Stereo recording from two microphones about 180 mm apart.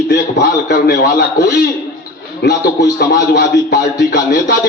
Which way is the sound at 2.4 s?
65° left (ahead or behind).